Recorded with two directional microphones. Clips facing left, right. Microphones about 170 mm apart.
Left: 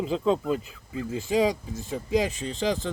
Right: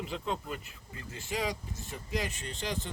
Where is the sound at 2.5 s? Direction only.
90° left.